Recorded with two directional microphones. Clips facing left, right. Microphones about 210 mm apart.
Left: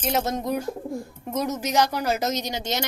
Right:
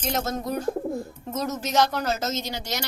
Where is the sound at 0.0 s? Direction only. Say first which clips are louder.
Left 2 dB; 10° left (ahead or behind).